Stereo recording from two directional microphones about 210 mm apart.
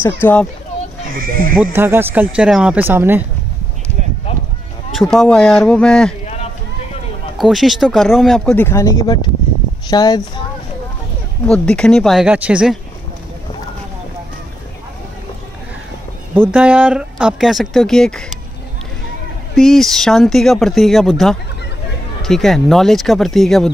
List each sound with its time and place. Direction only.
0.0 s speech: 10° left (ahead or behind)
1.1 s speech: 40° right (ahead or behind)
1.6 s speech: 10° right (ahead or behind)
4.9 s speech: centre (ahead or behind)
6.2 s run: 30° left (ahead or behind)
7.3 s speech: centre (ahead or behind); by 10.4 s 20° left (ahead or behind)
11.4 s speech: 5° left (ahead or behind)
16.3 s speech: 5° right (ahead or behind)
19.5 s speech: centre (ahead or behind)